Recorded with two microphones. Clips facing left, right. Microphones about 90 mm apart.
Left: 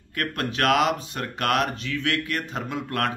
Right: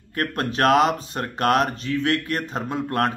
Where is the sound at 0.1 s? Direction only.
35° right (ahead or behind).